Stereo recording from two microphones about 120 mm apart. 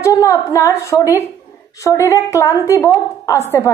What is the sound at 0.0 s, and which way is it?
A woman's voice, 25° left (ahead or behind).